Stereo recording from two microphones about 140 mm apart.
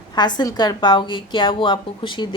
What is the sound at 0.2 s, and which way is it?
A woman's voice, 30° left (ahead or behind).